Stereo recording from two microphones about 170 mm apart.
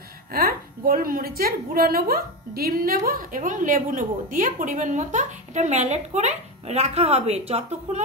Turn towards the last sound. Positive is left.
turn(degrees=-40)  # may be behind; listen again after turning